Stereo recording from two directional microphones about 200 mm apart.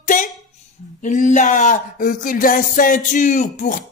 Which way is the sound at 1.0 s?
40° left (ahead or behind).